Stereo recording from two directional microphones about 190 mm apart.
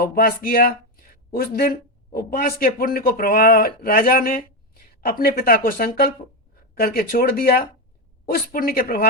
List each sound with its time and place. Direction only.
0.0 s speech: 50° left (ahead or behind)